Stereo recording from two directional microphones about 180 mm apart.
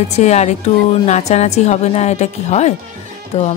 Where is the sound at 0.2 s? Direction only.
40° left (ahead or behind).